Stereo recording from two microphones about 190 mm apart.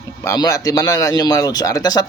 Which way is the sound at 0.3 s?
20° left (ahead or behind).